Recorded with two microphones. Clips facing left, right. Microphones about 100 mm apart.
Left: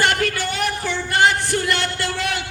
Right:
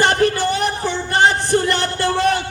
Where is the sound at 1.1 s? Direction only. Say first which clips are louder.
Right 3 dB; 30° right (ahead or behind).